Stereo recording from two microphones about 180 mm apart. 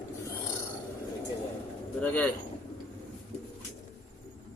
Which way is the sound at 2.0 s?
5° left (ahead or behind).